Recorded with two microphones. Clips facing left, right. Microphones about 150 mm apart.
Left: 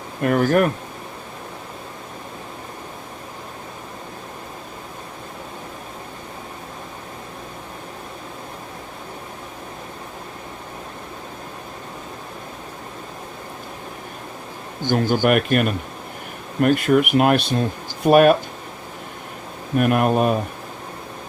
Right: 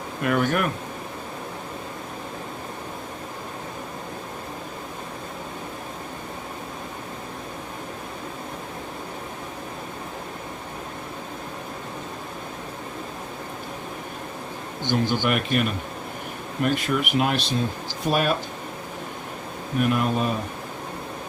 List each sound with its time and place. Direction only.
0.2 s speech: 40° left (ahead or behind)
14.8 s speech: 45° left (ahead or behind)
19.8 s speech: 55° left (ahead or behind)